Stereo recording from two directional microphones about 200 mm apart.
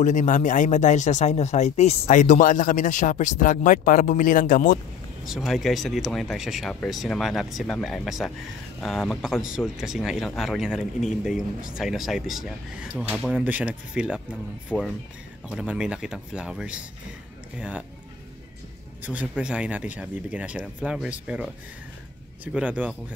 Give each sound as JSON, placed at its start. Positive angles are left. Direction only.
{"t": 0.0, "sound": "speech", "side_deg": 40}
{"t": 5.2, "sound": "speech", "side_deg": 0}
{"t": 14.7, "sound": "speech", "side_deg": 5}
{"t": 15.5, "sound": "a man's voice", "side_deg": -5}
{"t": 19.0, "sound": "a man's voice", "side_deg": -5}